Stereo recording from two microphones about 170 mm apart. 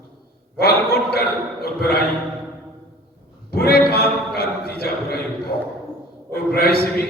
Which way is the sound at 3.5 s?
70° left (ahead or behind).